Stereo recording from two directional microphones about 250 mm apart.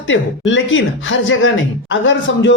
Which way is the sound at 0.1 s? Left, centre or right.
Left.